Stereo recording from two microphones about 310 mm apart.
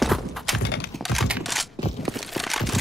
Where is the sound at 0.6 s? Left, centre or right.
Left.